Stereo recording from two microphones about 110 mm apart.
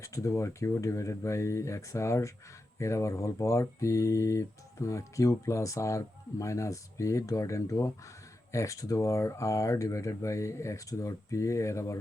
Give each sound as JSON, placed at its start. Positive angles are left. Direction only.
{"t": 0.0, "sound": "speech", "side_deg": 30}